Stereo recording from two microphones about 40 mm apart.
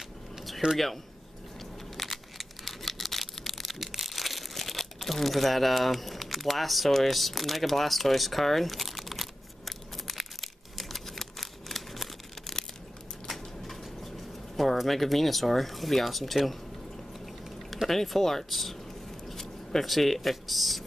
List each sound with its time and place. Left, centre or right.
0.6 s speech: right
1.6 s a sound: centre
17.8 s speech: centre